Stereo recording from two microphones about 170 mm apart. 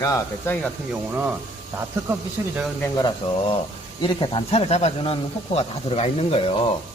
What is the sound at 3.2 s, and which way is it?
Speech, 30° left (ahead or behind).